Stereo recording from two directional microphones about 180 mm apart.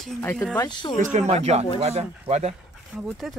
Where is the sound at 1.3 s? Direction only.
35° right (ahead or behind).